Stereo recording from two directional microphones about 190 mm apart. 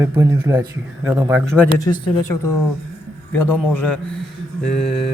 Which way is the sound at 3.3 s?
10° left (ahead or behind).